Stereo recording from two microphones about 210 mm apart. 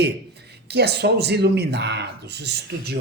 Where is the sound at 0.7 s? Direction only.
50° right (ahead or behind).